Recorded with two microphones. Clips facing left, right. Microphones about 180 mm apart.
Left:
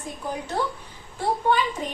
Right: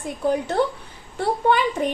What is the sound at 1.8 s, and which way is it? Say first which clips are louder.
Speech: right 8 dB; 60° right (ahead or behind).